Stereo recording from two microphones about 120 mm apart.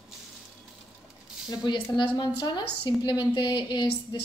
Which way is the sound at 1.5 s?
40° left (ahead or behind).